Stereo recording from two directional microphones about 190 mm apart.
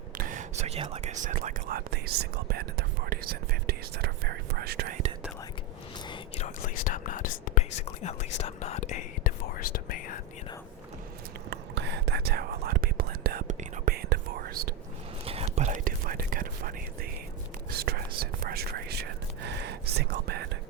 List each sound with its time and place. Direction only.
0.1 s speech: 45° right (ahead or behind)
6.1 s whispering: 35° left (ahead or behind)
8.0 s speech: 35° left (ahead or behind)
8.4 s whispering: 35° left (ahead or behind)
11.5 s whispering: 65° right (ahead or behind)
15.2 s whispering: 30° right (ahead or behind); by 20.5 s 55° right (ahead or behind)